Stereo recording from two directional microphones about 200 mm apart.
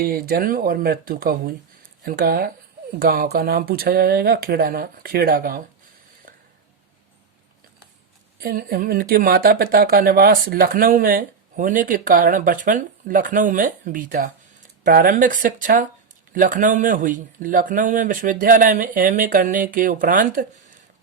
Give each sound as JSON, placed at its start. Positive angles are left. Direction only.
{"t": 0.0, "sound": "speech", "side_deg": -45}
{"t": 8.4, "sound": "speech", "side_deg": -50}